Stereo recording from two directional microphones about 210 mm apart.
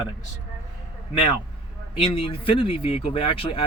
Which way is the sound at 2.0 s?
25° left (ahead or behind).